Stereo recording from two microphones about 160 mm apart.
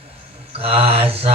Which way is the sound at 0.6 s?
40° right (ahead or behind).